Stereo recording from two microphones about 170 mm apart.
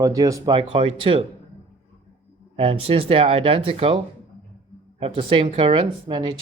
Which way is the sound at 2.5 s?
35° right (ahead or behind).